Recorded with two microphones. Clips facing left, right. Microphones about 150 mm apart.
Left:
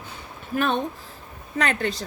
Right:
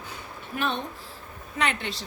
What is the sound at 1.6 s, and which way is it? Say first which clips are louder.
Speech: left 4 dB; 40° left (ahead or behind).